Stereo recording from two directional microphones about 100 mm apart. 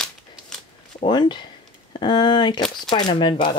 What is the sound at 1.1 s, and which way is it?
Speech, 50° left (ahead or behind).